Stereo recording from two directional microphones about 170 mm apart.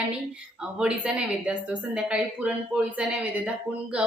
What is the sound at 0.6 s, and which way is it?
A woman's voice, 5° right (ahead or behind).